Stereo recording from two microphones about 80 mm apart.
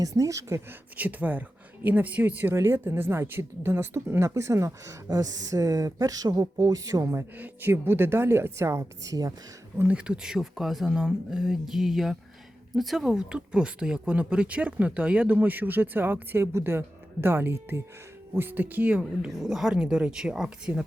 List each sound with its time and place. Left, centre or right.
0.0 s a woman's voice: right
0.7 s speech: right
7.3 s speech: right
9.7 s speech: centre
19.3 s speech: centre